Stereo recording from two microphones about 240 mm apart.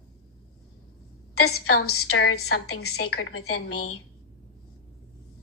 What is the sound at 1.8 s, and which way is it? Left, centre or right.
A woman's voice, left.